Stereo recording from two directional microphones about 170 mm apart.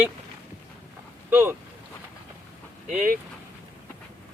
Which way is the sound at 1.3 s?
15° right (ahead or behind).